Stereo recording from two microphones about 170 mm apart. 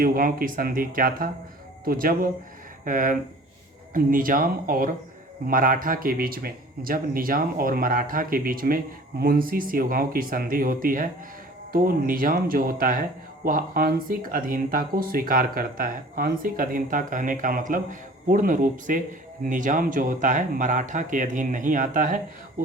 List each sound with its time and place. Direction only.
0.0 s speech: 60° right (ahead or behind)